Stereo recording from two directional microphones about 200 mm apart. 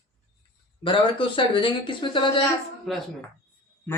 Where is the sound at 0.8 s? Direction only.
25° left (ahead or behind).